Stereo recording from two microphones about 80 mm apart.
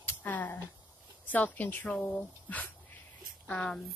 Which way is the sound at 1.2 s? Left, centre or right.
Left.